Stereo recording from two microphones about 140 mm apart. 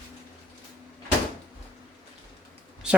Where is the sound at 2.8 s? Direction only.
5° right (ahead or behind).